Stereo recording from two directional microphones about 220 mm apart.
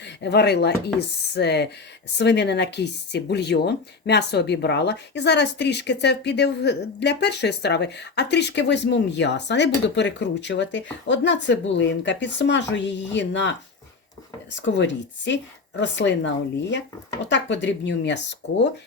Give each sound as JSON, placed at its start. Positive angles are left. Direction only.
{"t": 0.0, "sound": "speech", "side_deg": 50}
{"t": 14.6, "sound": "speech", "side_deg": 55}